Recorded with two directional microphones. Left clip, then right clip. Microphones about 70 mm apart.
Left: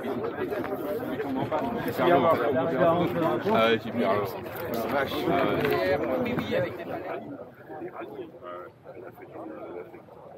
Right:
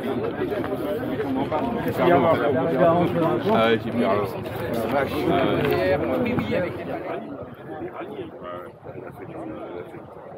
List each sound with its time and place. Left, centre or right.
0.1 s chatter: centre
2.0 s speech: left